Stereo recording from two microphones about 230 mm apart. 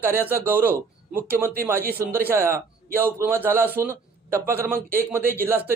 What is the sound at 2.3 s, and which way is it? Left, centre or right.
A man's voice, centre.